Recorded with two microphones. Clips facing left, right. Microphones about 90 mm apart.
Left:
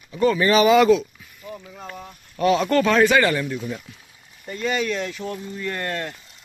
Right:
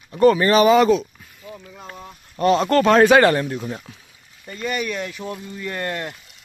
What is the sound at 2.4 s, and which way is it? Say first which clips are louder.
Speech: right 2 dB; 40° right (ahead or behind).